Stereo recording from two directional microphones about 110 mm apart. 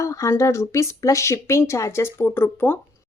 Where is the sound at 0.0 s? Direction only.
30° left (ahead or behind).